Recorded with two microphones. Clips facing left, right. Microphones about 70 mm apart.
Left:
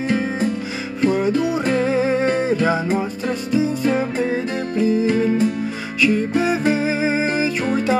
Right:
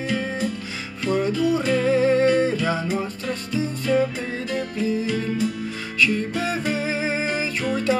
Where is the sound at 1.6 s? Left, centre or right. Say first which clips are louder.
Left 3 dB; left.